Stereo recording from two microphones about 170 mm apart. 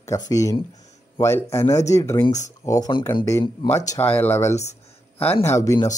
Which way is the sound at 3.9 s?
10° left (ahead or behind).